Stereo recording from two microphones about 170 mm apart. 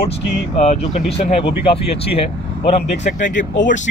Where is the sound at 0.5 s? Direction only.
45° left (ahead or behind).